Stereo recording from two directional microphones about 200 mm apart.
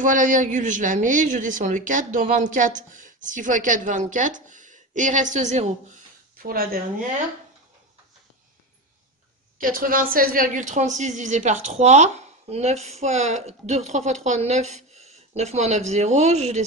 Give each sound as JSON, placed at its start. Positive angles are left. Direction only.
{"t": 0.0, "sound": "a woman's voice", "side_deg": -40}
{"t": 6.3, "sound": "speech", "side_deg": -45}
{"t": 9.6, "sound": "a woman's voice", "side_deg": -45}